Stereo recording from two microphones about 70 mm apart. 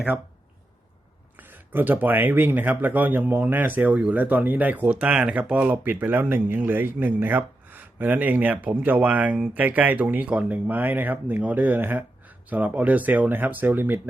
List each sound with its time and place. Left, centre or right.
1.4 s speech: right